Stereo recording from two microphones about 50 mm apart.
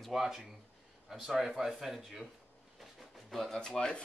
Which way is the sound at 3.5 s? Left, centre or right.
Centre.